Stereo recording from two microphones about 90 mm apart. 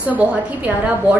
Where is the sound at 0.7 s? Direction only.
15° right (ahead or behind).